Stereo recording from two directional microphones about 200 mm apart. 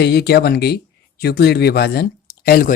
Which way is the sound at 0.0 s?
55° left (ahead or behind).